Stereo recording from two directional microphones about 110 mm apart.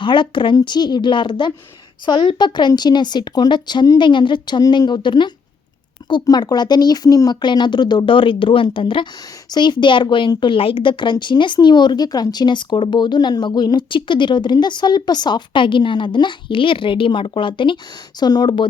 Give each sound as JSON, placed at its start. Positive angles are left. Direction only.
{"t": 0.0, "sound": "speech", "side_deg": 45}
{"t": 18.2, "sound": "speech", "side_deg": 40}